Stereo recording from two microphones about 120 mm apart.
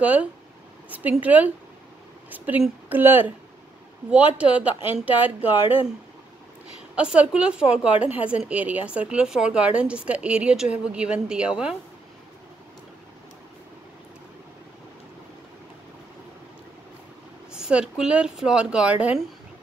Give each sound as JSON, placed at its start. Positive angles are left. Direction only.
{"t": 0.0, "sound": "a woman's voice", "side_deg": -10}
{"t": 7.0, "sound": "a woman's voice", "side_deg": -10}
{"t": 17.5, "sound": "a woman's voice", "side_deg": -5}